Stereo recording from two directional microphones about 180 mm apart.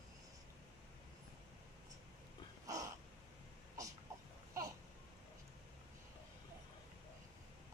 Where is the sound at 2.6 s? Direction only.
20° right (ahead or behind).